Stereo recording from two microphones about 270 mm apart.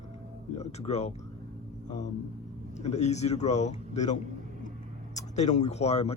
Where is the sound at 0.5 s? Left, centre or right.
Left.